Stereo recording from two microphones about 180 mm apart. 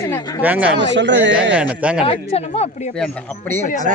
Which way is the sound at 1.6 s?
5° right (ahead or behind).